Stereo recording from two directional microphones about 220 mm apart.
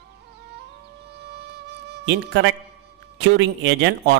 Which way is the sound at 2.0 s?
50° right (ahead or behind).